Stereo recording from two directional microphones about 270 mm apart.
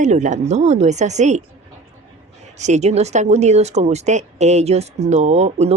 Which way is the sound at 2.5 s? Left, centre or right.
Right.